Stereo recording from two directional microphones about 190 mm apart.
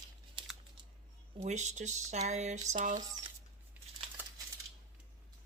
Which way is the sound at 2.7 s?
45° right (ahead or behind).